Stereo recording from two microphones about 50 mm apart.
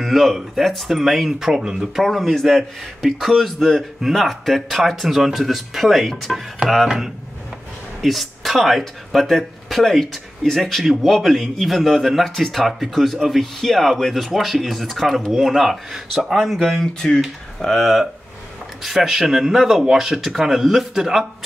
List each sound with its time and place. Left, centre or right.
0.0 s a man's voice: centre
2.0 s a man's voice: centre